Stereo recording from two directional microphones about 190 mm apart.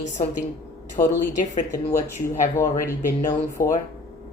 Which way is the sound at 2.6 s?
15° left (ahead or behind).